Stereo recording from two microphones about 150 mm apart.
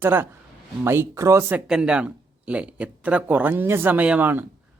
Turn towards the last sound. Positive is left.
turn(degrees=-10)  # may be behind; listen again after turning